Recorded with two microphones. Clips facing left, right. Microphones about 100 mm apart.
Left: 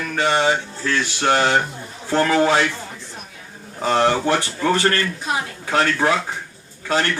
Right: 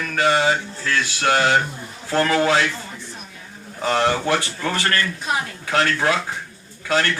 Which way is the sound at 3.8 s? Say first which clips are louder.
Left 2 dB; 30° left (ahead or behind).